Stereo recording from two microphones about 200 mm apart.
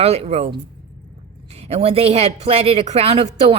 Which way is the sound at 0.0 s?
30° right (ahead or behind).